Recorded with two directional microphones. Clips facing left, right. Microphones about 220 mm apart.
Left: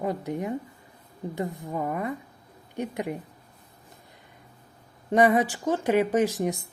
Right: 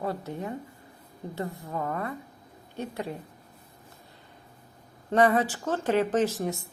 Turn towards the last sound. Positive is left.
turn(degrees=15)  # may be behind; listen again after turning